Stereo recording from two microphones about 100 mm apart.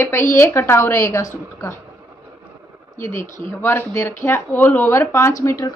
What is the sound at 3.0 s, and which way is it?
A woman's voice, 25° left (ahead or behind).